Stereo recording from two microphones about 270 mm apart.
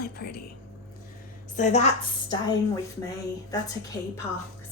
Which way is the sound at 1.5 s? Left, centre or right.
Left.